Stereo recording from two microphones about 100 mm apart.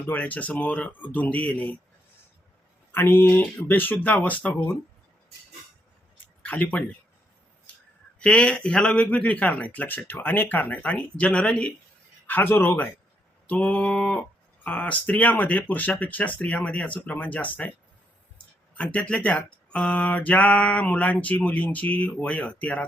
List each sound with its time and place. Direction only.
0.1 s speech: 15° left (ahead or behind)
2.9 s speech: 20° left (ahead or behind)
6.4 s speech: 15° left (ahead or behind)
8.2 s speech: 10° left (ahead or behind)
12.3 s speech: 20° left (ahead or behind)
18.8 s speech: 15° left (ahead or behind)